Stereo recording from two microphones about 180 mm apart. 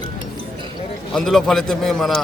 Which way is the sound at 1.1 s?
Centre (ahead or behind).